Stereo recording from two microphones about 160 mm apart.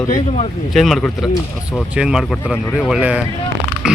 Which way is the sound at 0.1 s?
45° left (ahead or behind).